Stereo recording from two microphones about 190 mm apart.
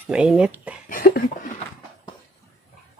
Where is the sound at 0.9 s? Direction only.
45° left (ahead or behind).